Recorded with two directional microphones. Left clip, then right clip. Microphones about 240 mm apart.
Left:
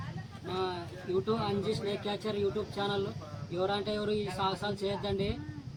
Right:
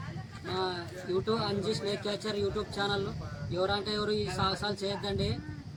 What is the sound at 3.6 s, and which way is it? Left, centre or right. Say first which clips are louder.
Speech: right 1 dB; centre.